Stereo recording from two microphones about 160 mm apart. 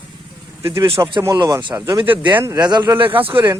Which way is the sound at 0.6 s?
15° right (ahead or behind).